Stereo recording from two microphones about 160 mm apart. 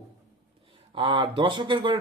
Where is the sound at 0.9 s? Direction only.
30° right (ahead or behind).